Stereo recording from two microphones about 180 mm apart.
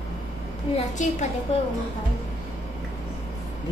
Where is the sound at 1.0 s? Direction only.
45° left (ahead or behind).